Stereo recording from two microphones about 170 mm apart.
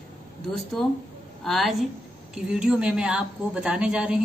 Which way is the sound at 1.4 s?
Centre (ahead or behind).